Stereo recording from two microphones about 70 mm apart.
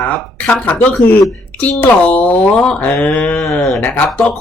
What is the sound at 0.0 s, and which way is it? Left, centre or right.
Speech, left.